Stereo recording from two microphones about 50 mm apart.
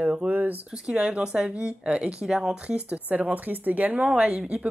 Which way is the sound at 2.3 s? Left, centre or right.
Centre.